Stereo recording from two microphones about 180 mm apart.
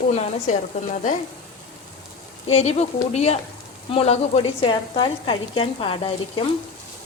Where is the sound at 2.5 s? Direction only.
35° left (ahead or behind).